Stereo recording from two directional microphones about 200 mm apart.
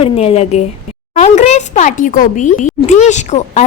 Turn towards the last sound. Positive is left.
turn(degrees=35)  # may be behind; listen again after turning